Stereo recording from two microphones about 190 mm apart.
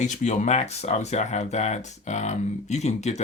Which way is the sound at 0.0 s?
40° left (ahead or behind).